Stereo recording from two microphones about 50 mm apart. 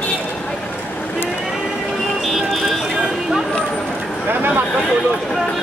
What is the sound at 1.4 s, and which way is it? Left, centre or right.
Music, centre.